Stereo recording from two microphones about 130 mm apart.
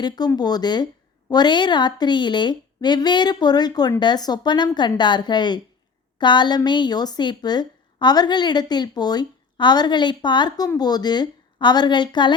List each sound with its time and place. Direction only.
0.3 s a woman's voice: 30° left (ahead or behind)